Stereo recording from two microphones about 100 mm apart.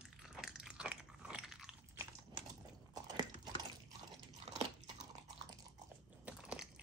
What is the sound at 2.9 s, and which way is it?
Biting, 45° right (ahead or behind).